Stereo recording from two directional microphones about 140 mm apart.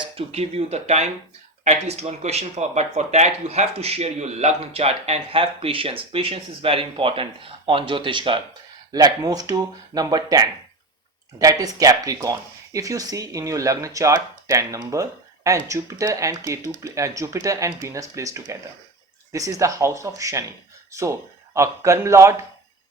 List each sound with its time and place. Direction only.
0.0 s speech: 45° right (ahead or behind); by 22.4 s 20° right (ahead or behind)